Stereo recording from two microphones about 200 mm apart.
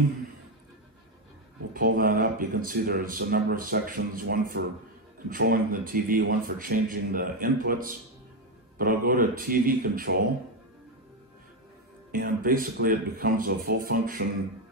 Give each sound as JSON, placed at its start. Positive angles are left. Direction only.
{"t": 1.7, "sound": "speech", "side_deg": -45}
{"t": 12.1, "sound": "speech", "side_deg": -45}